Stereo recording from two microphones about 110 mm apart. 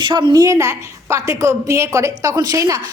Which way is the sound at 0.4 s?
25° right (ahead or behind).